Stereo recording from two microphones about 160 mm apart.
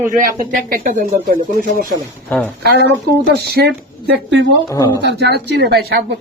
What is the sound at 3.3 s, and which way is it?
Speech, 80° right.